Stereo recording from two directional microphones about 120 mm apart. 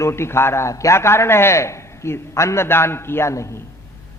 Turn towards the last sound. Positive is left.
turn(degrees=25)  # may be behind; listen again after turning